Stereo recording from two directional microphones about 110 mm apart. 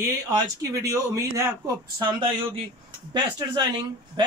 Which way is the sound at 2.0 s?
45° right (ahead or behind).